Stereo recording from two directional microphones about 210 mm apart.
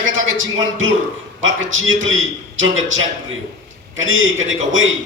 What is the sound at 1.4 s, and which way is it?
A woman's voice, 65° right (ahead or behind).